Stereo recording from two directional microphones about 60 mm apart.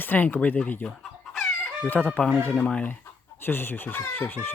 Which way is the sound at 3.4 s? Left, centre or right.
Left.